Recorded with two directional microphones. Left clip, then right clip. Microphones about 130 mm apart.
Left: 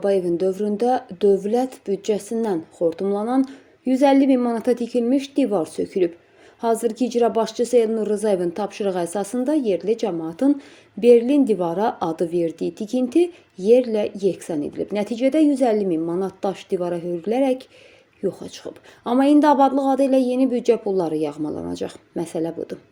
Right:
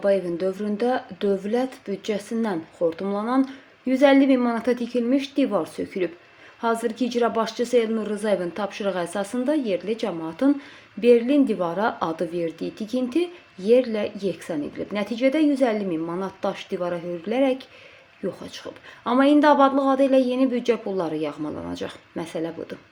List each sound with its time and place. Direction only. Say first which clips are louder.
0.0 s a woman's voice: left 2 dB; 30° left (ahead or behind)